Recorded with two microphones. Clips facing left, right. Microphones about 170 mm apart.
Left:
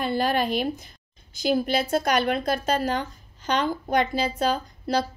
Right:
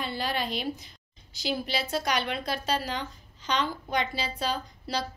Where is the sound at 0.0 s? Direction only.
50° left (ahead or behind).